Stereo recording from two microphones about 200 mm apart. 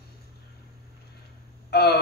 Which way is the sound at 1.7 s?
55° left (ahead or behind).